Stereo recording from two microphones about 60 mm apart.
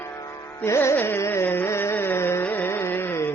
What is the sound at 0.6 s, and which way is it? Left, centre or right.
Music, left.